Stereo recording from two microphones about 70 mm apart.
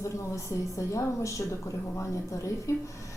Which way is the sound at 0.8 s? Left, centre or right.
Left.